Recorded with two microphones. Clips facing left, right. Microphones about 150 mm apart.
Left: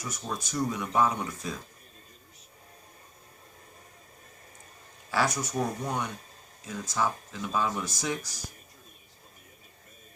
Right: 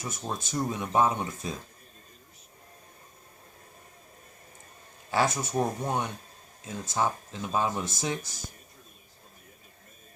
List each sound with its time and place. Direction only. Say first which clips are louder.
0.0 s speech: right 1 dB; 25° right (ahead or behind)
5.1 s speech: right 2 dB; 25° right (ahead or behind)